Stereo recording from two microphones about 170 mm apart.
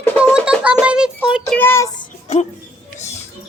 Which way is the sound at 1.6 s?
15° left (ahead or behind).